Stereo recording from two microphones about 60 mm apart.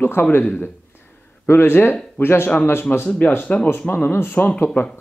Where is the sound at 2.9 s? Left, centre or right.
Centre.